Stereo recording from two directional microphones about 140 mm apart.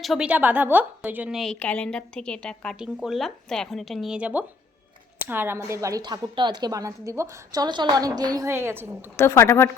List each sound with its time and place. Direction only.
0.0 s a woman's voice: centre (ahead or behind)
0.3 s a woman's voice: 10° right (ahead or behind)
1.4 s a woman's voice: 5° left (ahead or behind)
2.7 s a woman's voice: 5° right (ahead or behind)
9.1 s a woman's voice: 20° left (ahead or behind)